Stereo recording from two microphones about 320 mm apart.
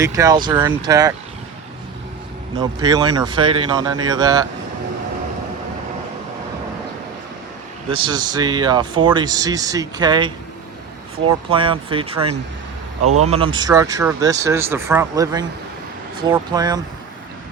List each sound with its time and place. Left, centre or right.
0.0 s speech: centre
2.6 s speech: centre
7.9 s speech: centre
13.1 s speech: right
13.3 s speech: centre